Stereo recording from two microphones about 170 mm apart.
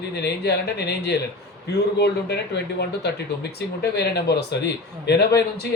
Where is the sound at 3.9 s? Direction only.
75° left (ahead or behind).